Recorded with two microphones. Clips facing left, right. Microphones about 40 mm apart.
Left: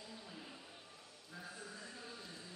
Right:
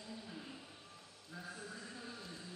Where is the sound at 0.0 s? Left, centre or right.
Centre.